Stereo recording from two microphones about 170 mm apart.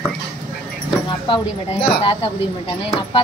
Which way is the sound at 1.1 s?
30° left (ahead or behind).